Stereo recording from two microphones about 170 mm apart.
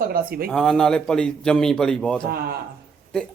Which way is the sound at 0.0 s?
60° right (ahead or behind).